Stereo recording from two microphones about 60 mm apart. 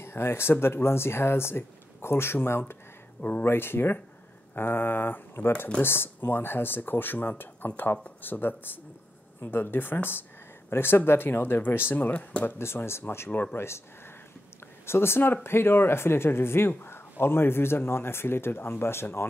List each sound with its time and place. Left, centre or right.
0.0 s speech: left
3.2 s speech: left
3.4 s speech: left
12.1 s speech: left
12.4 s speech: left
13.3 s speech: left
13.6 s speech: left
14.9 s speech: left